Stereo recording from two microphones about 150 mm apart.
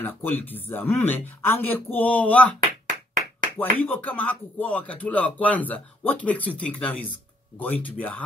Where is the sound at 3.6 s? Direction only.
10° left (ahead or behind).